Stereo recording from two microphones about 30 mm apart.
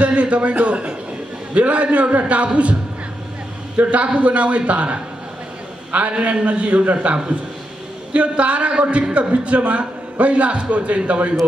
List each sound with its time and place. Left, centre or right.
0.0 s a man's voice: right
6.3 s a man's voice: right